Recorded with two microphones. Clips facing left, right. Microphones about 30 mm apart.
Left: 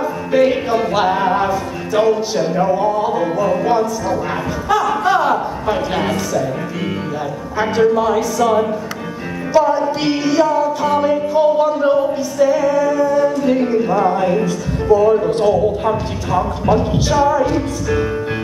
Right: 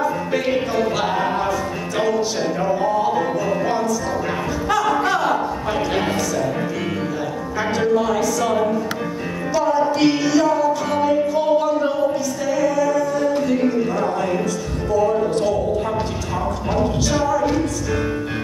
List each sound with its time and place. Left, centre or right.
0.5 s music: centre
5.0 s speech: centre
7.5 s music: centre
9.5 s music: centre
11.9 s a capella: left
13.8 s music: centre
14.9 s speech: left
16.7 s music: centre
17.2 s speech: left